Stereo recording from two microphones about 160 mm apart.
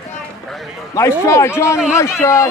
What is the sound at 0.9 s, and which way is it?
A man's voice, 15° left (ahead or behind).